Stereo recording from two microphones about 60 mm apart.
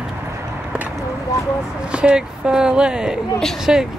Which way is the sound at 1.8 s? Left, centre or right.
Centre.